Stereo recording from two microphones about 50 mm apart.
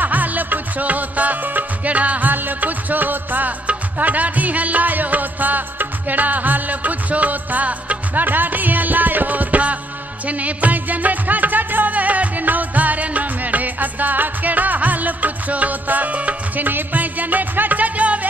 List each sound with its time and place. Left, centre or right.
0.0 s music: right